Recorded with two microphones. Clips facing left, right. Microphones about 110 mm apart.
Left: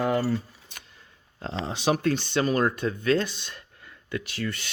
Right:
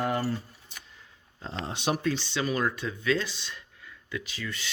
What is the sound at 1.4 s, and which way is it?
Speech, 80° left.